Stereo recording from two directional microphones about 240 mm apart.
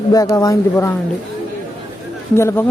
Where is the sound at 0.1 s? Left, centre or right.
Centre.